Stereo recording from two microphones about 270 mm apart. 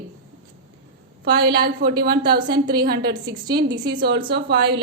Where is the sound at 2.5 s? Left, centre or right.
Centre.